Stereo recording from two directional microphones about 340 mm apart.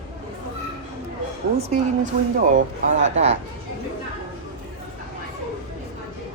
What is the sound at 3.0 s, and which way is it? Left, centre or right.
Speech, centre.